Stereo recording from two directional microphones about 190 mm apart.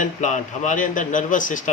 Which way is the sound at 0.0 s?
40° left (ahead or behind).